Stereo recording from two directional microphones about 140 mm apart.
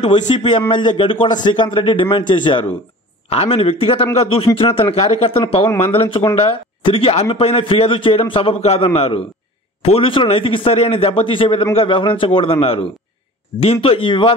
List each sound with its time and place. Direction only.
0.1 s speech: 35° left (ahead or behind)
3.3 s speech: 45° left (ahead or behind)